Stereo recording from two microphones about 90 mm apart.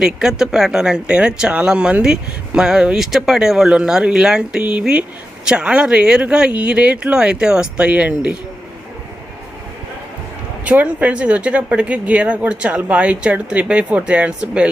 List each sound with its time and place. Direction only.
0.0 s speech: 5° right (ahead or behind)
10.6 s speech: 15° right (ahead or behind)